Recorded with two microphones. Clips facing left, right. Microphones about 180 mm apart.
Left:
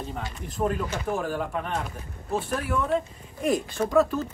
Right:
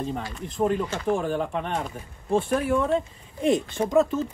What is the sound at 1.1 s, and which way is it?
Speech, 25° right (ahead or behind).